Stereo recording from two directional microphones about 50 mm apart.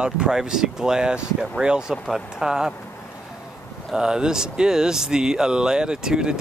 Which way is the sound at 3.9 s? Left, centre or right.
Centre.